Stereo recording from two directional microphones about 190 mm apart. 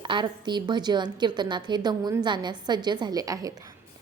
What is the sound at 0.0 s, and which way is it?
A woman's voice, 25° right (ahead or behind).